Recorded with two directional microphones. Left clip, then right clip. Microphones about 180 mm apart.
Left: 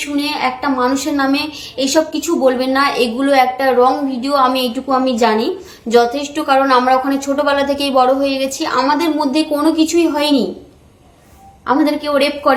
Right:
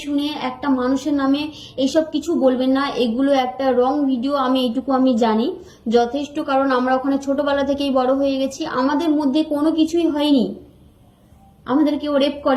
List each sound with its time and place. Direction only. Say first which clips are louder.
0.2 s a woman's voice: left 10 dB; 20° left (ahead or behind)
11.6 s a woman's voice: left 4 dB; 20° left (ahead or behind)